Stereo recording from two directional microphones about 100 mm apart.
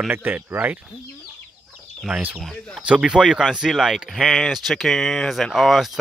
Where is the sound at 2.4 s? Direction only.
5° left (ahead or behind).